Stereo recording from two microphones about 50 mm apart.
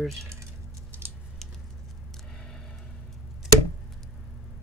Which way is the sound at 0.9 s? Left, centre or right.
Right.